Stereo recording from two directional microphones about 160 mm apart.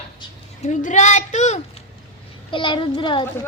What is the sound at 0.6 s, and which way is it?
Speech, 50° left (ahead or behind).